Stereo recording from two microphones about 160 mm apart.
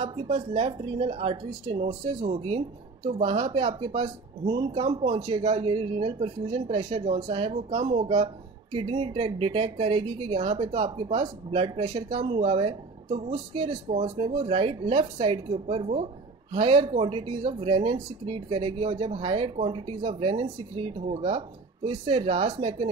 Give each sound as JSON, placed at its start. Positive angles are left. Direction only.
{"t": 0.0, "sound": "speech", "side_deg": -35}
{"t": 7.5, "sound": "speech", "side_deg": -45}